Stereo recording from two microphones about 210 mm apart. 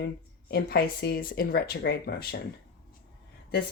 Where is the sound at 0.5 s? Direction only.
50° left (ahead or behind).